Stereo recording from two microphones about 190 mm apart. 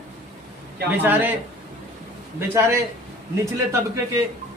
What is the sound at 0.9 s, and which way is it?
Speech, 10° right (ahead or behind).